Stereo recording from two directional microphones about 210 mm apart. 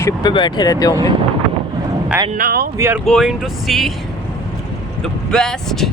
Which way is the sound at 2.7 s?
15° right (ahead or behind).